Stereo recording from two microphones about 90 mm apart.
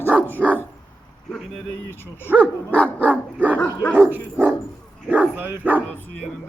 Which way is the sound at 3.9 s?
25° right (ahead or behind).